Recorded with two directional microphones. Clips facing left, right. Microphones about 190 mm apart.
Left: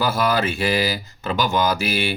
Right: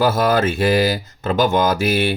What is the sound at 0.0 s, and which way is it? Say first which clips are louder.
Speech: right 4 dB; 45° right (ahead or behind).